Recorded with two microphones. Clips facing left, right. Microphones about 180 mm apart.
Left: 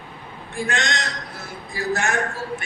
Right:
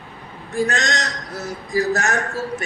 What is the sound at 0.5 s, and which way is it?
A man's voice, 40° right (ahead or behind).